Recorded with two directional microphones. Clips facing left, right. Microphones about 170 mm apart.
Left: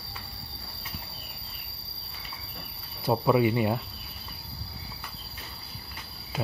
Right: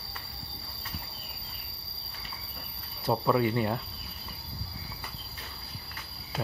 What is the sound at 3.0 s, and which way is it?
Speech, 10° left (ahead or behind).